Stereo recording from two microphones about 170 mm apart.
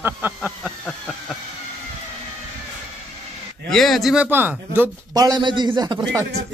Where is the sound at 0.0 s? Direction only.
10° right (ahead or behind).